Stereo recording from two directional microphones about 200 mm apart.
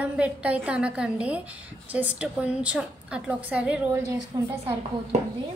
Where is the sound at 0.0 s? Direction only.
5° right (ahead or behind).